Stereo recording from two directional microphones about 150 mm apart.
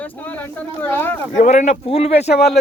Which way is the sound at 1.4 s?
50° left (ahead or behind).